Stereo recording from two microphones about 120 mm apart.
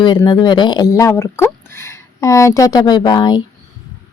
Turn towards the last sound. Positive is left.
turn(degrees=35)  # may be behind; listen again after turning